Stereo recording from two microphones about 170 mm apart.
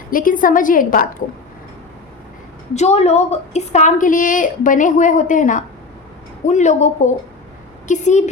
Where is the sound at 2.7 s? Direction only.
40° left (ahead or behind).